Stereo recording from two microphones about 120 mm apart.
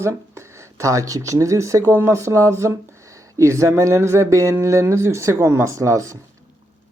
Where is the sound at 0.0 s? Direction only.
25° right (ahead or behind).